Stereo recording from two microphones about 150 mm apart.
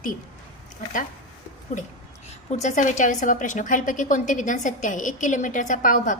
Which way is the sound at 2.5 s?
50° left (ahead or behind).